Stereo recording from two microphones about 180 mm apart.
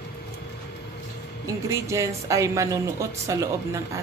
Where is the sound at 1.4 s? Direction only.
15° right (ahead or behind).